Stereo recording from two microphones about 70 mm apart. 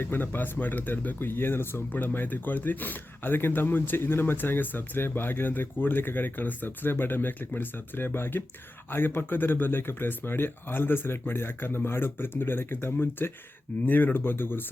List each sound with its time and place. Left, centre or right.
0.0 s speech: left